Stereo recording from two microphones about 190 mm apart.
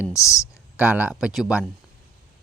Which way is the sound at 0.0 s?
15° left (ahead or behind).